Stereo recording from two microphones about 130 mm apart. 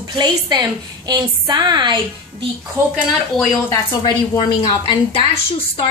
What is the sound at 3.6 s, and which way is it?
A woman's voice, 30° left (ahead or behind).